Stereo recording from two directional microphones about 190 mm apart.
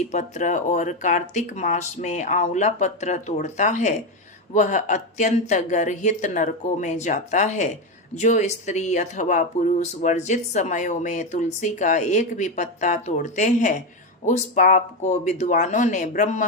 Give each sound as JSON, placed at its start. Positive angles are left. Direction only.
{"t": 0.1, "sound": "speech", "side_deg": 40}